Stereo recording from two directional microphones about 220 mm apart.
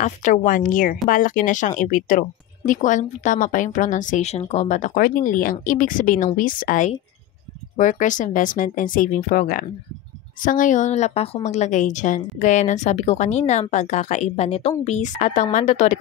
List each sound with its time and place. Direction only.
0.0 s a woman's voice: 35° left (ahead or behind)